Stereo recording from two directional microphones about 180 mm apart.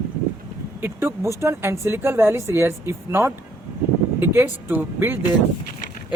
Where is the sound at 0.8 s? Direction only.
10° right (ahead or behind).